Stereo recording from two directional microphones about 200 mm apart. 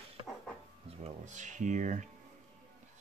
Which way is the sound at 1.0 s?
35° right (ahead or behind).